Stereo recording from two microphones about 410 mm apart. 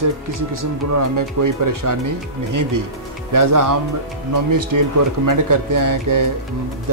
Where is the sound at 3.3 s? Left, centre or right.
Right.